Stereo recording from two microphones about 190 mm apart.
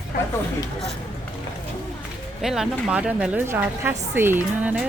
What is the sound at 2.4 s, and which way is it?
A woman's voice, centre (ahead or behind).